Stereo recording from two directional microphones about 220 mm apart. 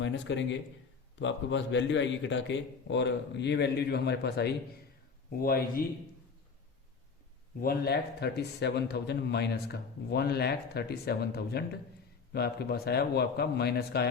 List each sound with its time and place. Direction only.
0.0 s a man's voice: 55° left (ahead or behind)
7.6 s a man's voice: 45° left (ahead or behind)